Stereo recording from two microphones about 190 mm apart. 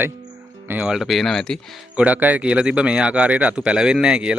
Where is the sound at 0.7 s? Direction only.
5° right (ahead or behind).